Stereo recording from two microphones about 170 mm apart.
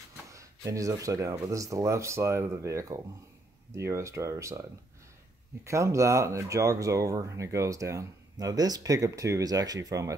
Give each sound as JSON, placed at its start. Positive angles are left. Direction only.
{"t": 0.3, "sound": "speech", "side_deg": -20}
{"t": 5.7, "sound": "speech", "side_deg": -15}